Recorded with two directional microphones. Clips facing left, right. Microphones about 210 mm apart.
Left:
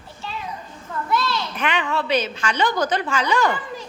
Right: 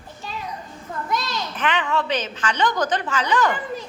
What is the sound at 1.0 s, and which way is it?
Children playing, 15° right (ahead or behind).